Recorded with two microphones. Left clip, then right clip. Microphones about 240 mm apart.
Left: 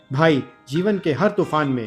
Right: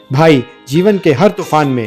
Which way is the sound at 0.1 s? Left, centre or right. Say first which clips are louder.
Right 8 dB; right.